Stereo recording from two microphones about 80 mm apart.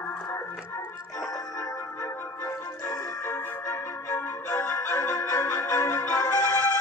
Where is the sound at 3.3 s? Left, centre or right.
Left.